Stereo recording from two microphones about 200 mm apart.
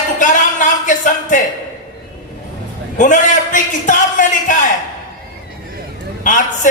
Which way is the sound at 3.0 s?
40° left (ahead or behind).